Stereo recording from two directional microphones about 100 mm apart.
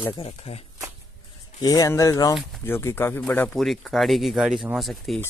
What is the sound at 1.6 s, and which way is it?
Speech, 35° left (ahead or behind).